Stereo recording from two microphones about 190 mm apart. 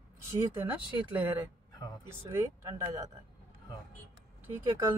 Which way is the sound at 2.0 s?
15° right (ahead or behind).